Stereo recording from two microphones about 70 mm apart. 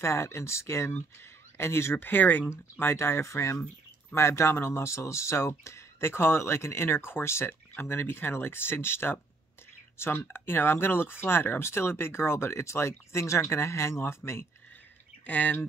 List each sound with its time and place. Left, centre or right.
0.0 s speech: left
2.5 s speech: left
15.2 s speech: left